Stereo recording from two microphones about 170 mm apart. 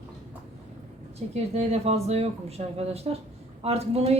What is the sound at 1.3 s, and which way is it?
Speech, 40° right (ahead or behind).